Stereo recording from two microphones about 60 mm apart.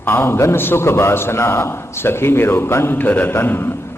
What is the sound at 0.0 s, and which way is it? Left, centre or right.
A man's voice, left.